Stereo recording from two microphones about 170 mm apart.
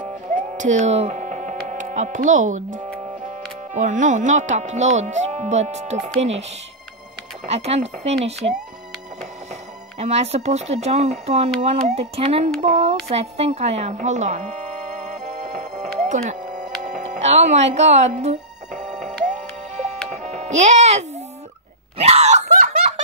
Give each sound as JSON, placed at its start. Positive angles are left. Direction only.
{"t": 0.3, "sound": "music", "side_deg": -50}
{"t": 1.7, "sound": "speech", "side_deg": -50}
{"t": 7.4, "sound": "speech", "side_deg": -40}
{"t": 16.8, "sound": "music", "side_deg": -45}
{"t": 21.9, "sound": "a sound", "side_deg": -35}